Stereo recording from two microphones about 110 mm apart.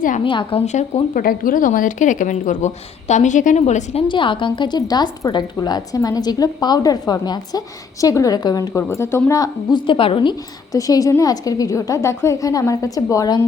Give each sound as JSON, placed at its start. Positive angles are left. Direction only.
{"t": 0.3, "sound": "a woman's voice", "side_deg": 50}
{"t": 0.6, "sound": "a woman's voice", "side_deg": 90}
{"t": 4.1, "sound": "a woman's voice", "side_deg": 50}
{"t": 9.4, "sound": "a woman's voice", "side_deg": 45}
{"t": 10.7, "sound": "a woman's voice", "side_deg": 30}